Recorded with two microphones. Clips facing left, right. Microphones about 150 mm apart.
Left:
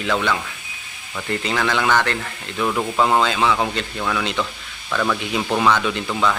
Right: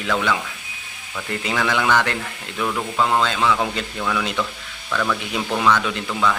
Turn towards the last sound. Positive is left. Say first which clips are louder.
# left 1 dB
turn(degrees=5)  # may be behind; listen again after turning